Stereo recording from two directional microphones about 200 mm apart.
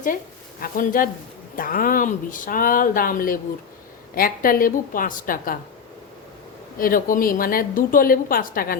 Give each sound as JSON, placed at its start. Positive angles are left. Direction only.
{"t": 0.6, "sound": "a woman's voice", "side_deg": 45}
{"t": 6.7, "sound": "a woman's voice", "side_deg": 45}